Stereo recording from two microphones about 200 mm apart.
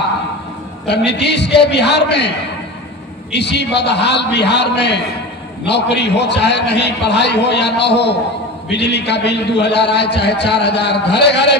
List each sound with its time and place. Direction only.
0.8 s a man's voice: 55° left (ahead or behind)